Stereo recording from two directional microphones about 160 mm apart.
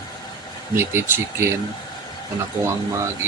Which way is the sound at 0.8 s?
15° right (ahead or behind).